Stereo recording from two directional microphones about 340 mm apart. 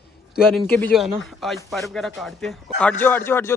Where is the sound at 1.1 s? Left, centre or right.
Centre.